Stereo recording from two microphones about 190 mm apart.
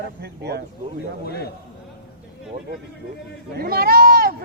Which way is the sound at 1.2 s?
55° left (ahead or behind).